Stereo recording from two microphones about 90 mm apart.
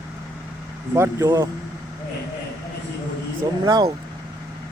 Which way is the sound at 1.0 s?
35° right (ahead or behind).